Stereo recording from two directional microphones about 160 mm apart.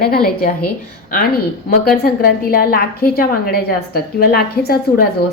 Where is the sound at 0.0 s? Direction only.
70° left (ahead or behind).